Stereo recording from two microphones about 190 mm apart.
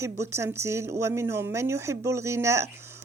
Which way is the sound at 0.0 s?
15° right (ahead or behind).